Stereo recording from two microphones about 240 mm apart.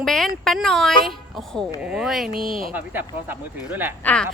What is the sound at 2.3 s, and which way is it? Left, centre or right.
Speech, right.